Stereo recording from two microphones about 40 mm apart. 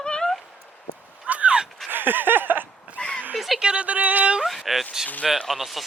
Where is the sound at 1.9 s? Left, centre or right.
Right.